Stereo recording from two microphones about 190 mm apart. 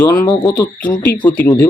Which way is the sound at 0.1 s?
20° left (ahead or behind).